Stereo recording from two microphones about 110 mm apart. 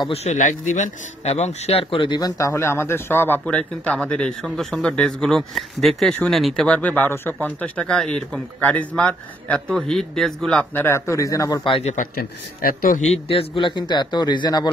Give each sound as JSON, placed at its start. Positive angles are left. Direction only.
{"t": 0.1, "sound": "a man's voice", "side_deg": 80}
{"t": 2.1, "sound": "a man's voice", "side_deg": 35}
{"t": 10.7, "sound": "a man's voice", "side_deg": 20}
{"t": 13.1, "sound": "a man's voice", "side_deg": 60}